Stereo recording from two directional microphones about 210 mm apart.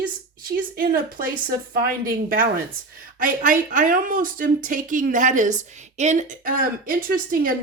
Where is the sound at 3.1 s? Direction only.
40° right (ahead or behind).